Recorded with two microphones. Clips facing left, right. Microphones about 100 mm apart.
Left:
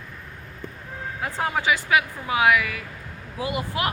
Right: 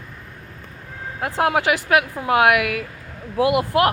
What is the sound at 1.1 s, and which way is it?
Speech, 60° right (ahead or behind).